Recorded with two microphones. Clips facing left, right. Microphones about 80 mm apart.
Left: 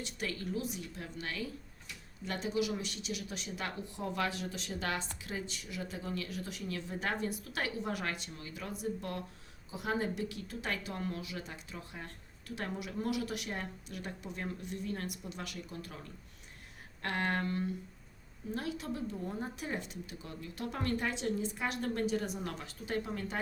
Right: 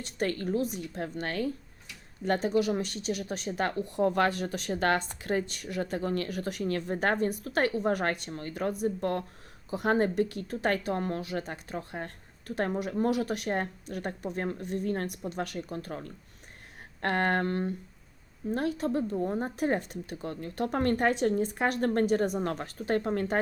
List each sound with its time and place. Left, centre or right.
0.0 s speech: right